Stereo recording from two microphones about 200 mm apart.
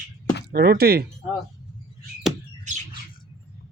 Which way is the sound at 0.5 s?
50° right (ahead or behind).